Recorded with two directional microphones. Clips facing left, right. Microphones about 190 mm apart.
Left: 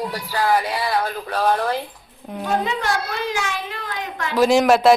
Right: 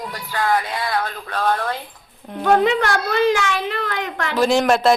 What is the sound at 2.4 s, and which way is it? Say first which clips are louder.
A child's voice: right 6 dB; 70° right (ahead or behind).